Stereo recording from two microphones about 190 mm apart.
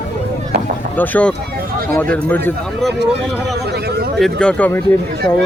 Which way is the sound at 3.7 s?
55° right (ahead or behind).